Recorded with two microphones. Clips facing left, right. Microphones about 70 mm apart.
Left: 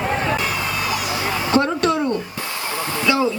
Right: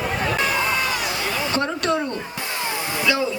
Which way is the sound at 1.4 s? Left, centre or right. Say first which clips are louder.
Left 9 dB; left.